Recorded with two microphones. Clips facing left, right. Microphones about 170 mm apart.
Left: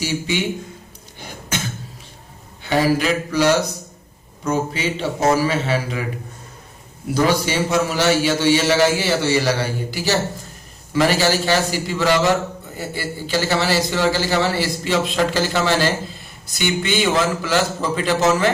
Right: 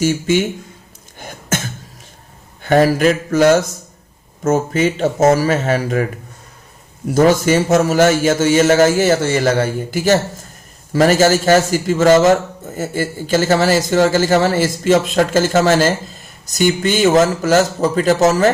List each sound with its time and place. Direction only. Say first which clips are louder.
0.0 s a man's voice: right 7 dB; 45° right (ahead or behind)
1.5 s cough: right 5 dB; 50° right (ahead or behind)
2.6 s a man's voice: right 5 dB; 50° right (ahead or behind)
7.1 s a man's voice: right 6 dB; 45° right (ahead or behind)